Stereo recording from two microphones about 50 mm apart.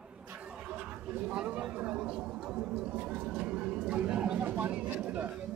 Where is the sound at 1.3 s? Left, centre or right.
Right.